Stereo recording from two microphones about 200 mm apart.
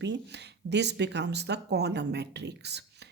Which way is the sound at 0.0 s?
60° right (ahead or behind).